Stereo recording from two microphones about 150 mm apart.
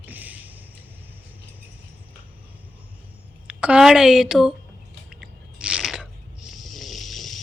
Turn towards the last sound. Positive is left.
turn(degrees=0)  # may be behind; listen again after turning